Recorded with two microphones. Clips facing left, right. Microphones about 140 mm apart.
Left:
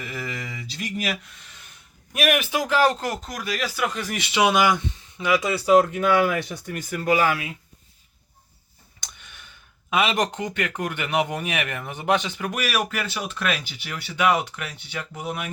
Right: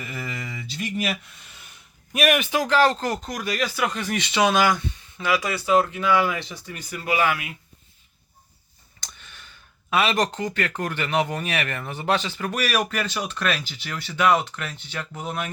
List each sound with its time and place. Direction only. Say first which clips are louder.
0.0 s a sound: left 1 dB; centre (ahead or behind)
2.1 s speech: right 1 dB; centre (ahead or behind); by 5.4 s 20° left (ahead or behind)
5.5 s speech: left 5 dB; 35° left (ahead or behind)
9.9 s speech: even; 15° left (ahead or behind)